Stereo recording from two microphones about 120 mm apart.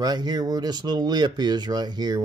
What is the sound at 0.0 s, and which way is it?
Speech, 35° right (ahead or behind).